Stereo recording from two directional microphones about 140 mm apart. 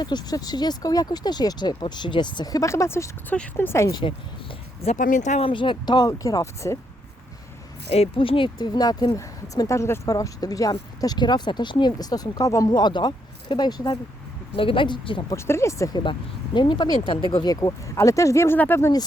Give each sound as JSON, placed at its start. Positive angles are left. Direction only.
{"t": 0.0, "sound": "speech", "side_deg": 30}
{"t": 4.9, "sound": "speech", "side_deg": 70}
{"t": 5.5, "sound": "speech", "side_deg": 35}
{"t": 7.9, "sound": "speech", "side_deg": 45}
{"t": 15.3, "sound": "speech", "side_deg": 20}
{"t": 16.6, "sound": "speech", "side_deg": 35}